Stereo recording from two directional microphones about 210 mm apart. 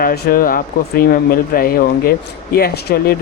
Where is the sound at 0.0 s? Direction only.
45° left (ahead or behind).